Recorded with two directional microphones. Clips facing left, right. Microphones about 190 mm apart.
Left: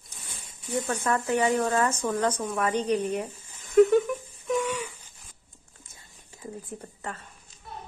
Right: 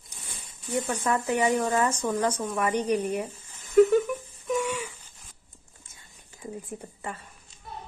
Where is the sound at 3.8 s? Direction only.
Centre (ahead or behind).